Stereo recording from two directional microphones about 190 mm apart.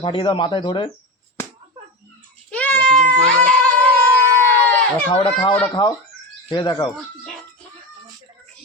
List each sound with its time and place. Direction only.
0.0 s speech: 25° left (ahead or behind)
2.5 s a sound: 5° left (ahead or behind)
5.1 s speech: 25° left (ahead or behind)